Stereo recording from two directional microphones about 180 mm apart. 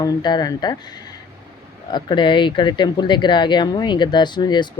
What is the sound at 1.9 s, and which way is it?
Speech, 25° left (ahead or behind).